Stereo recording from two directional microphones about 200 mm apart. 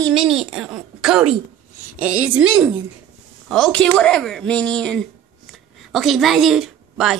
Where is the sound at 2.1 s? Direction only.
90° right.